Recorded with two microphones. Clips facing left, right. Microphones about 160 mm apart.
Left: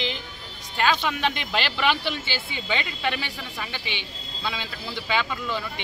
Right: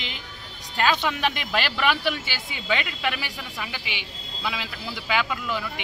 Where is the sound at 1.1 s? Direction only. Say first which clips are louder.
Even; 5° right (ahead or behind).